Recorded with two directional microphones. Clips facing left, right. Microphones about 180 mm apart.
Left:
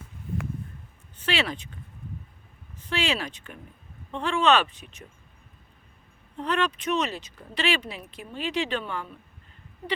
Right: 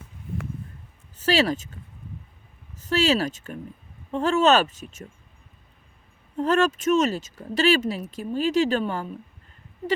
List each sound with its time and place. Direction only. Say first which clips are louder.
1.2 s speech: right 7 dB; 40° right (ahead or behind)
2.8 s speech: right 7 dB; 40° right (ahead or behind)
6.3 s speech: right 6 dB; 45° right (ahead or behind)